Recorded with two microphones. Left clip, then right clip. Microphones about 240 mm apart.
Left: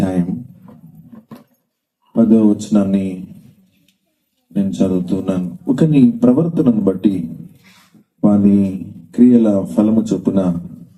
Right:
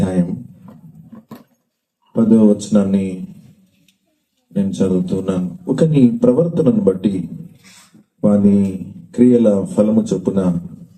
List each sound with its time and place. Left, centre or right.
2.1 s a man's voice: left
4.5 s a man's voice: left
7.6 s a sound: right
8.2 s a man's voice: left